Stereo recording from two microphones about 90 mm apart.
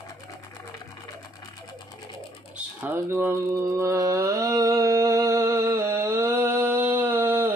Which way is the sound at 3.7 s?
35° right (ahead or behind).